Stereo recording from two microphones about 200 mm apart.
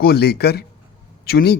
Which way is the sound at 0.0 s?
55° left (ahead or behind).